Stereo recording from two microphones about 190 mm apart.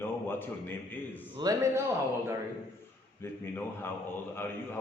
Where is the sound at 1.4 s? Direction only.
20° right (ahead or behind).